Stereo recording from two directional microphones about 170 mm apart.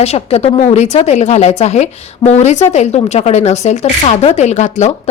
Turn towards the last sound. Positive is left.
turn(degrees=40)  # may be behind; listen again after turning